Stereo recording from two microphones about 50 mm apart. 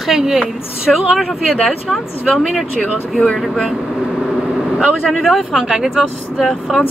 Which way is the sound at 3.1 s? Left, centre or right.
Centre.